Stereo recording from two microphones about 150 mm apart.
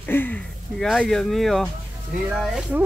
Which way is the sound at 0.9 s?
Centre (ahead or behind).